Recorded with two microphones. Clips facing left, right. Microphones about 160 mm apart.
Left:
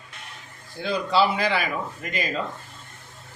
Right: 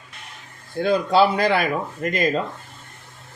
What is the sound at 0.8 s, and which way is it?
Speech, 50° right (ahead or behind).